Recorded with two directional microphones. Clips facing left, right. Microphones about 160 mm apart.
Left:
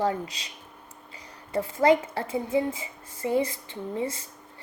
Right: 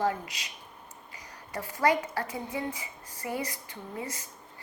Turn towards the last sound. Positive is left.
turn(degrees=30)  # may be behind; listen again after turning